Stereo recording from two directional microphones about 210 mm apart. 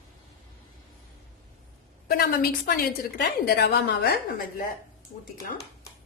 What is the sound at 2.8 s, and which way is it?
A woman's voice, 50° left (ahead or behind).